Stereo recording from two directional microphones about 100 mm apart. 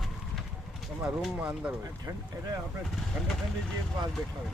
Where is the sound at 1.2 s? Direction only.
10° right (ahead or behind).